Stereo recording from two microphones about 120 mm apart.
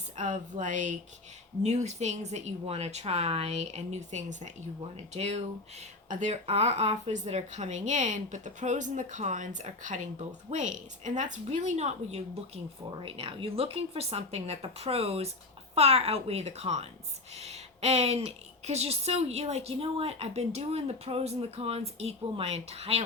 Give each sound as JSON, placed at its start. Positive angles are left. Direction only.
{"t": 0.2, "sound": "a woman's voice", "side_deg": -90}
{"t": 1.6, "sound": "speech", "side_deg": -70}
{"t": 5.1, "sound": "speech", "side_deg": -65}
{"t": 6.1, "sound": "a woman's voice", "side_deg": -80}
{"t": 13.0, "sound": "speech", "side_deg": -50}
{"t": 17.3, "sound": "a sound", "side_deg": -60}
{"t": 18.3, "sound": "speech", "side_deg": -60}